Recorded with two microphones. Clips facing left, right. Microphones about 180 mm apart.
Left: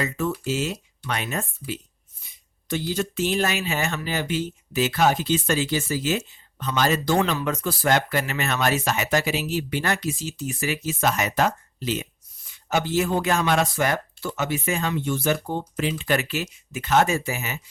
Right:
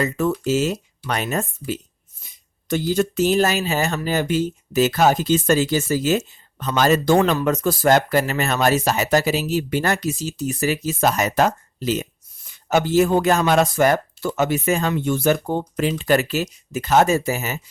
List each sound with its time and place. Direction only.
0.4 s speech: 45° right (ahead or behind)